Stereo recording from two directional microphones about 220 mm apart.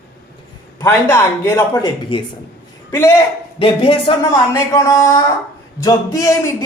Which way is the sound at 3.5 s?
25° left (ahead or behind).